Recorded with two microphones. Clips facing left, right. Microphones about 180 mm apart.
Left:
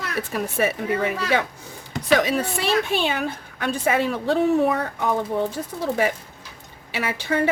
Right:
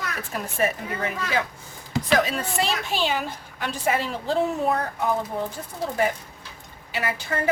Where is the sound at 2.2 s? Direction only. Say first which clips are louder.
Left 1 dB; 70° left (ahead or behind).